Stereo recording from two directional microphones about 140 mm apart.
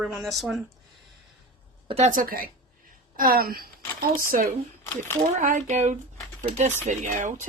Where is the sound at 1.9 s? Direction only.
50° right (ahead or behind).